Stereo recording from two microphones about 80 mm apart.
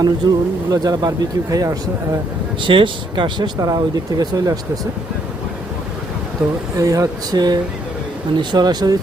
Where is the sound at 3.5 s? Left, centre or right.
Right.